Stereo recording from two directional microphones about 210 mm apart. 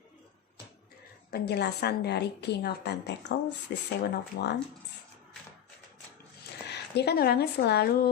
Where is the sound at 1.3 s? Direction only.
50° left (ahead or behind).